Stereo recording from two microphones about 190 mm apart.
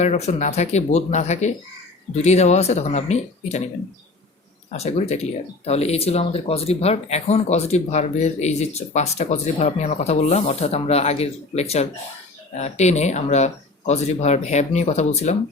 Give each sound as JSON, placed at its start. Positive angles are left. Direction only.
{"t": 0.0, "sound": "speech", "side_deg": 35}
{"t": 4.7, "sound": "speech", "side_deg": 35}